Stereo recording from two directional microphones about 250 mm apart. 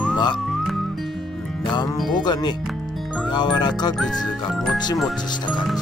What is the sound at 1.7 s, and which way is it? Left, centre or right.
Music, centre.